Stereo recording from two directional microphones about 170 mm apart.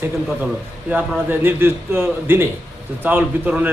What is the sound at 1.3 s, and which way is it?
A man's voice, 10° right (ahead or behind).